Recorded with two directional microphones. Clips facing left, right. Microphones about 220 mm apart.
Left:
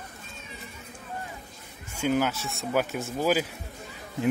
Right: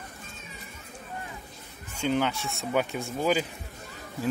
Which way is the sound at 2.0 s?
5° left (ahead or behind).